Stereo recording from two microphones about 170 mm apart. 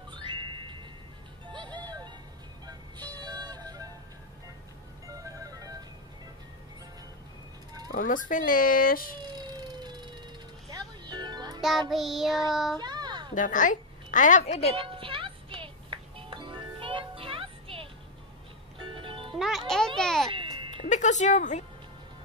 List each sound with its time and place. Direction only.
0.1 s music: 30° right (ahead or behind)
5.0 s music: 20° right (ahead or behind)
7.9 s speech: 55° left (ahead or behind)
9.2 s vehicle: 25° right (ahead or behind)
10.7 s music: 25° right (ahead or behind)
11.9 s child singing: centre (ahead or behind)
12.7 s a sound: 25° right (ahead or behind)
13.3 s a woman's voice: 50° left (ahead or behind)
14.8 s music: 30° right (ahead or behind)
19.3 s music: centre (ahead or behind)
20.2 s music: 30° right (ahead or behind)
20.9 s music: 45° left (ahead or behind)